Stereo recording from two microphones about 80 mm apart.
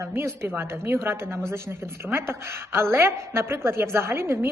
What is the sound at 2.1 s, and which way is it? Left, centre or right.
A woman's voice, right.